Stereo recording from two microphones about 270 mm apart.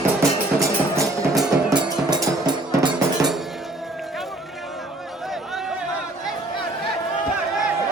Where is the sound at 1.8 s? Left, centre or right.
Centre.